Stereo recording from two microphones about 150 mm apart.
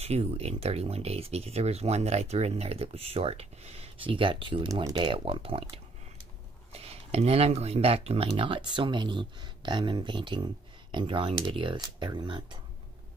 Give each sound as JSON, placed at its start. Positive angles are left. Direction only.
{"t": 0.0, "sound": "speech", "side_deg": -45}